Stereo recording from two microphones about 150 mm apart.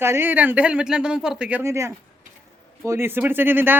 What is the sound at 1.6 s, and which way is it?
A woman's voice, 20° right (ahead or behind).